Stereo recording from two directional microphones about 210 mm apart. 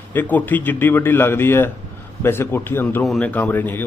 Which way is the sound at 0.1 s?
10° left (ahead or behind).